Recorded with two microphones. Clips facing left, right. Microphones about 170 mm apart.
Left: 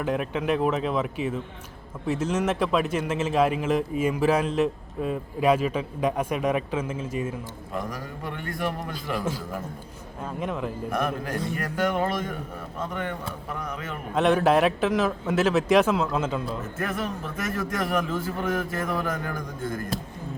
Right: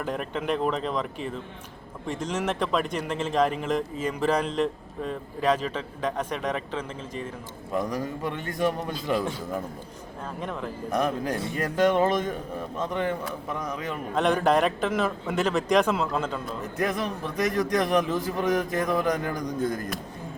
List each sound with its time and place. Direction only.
0.0 s a man's voice: 5° left (ahead or behind)
7.8 s a man's voice: 20° right (ahead or behind)
10.4 s a man's voice: 5° left (ahead or behind)
10.9 s a man's voice: 20° right (ahead or behind)
14.2 s a man's voice: 5° left (ahead or behind)
16.7 s a man's voice: 15° right (ahead or behind)